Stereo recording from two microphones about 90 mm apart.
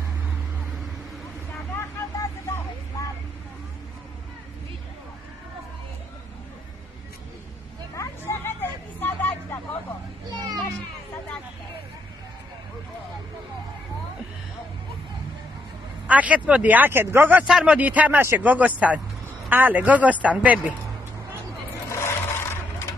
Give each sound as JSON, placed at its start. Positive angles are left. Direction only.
{"t": 7.9, "sound": "a sound", "side_deg": 35}
{"t": 9.0, "sound": "vehicle", "side_deg": 20}
{"t": 10.3, "sound": "children playing", "side_deg": -50}
{"t": 16.1, "sound": "speech", "side_deg": -15}
{"t": 17.5, "sound": "speech", "side_deg": -5}
{"t": 17.7, "sound": "speech", "side_deg": -15}
{"t": 21.8, "sound": "filing", "side_deg": 30}